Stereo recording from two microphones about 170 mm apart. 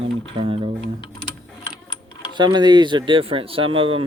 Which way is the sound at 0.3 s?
30° right (ahead or behind).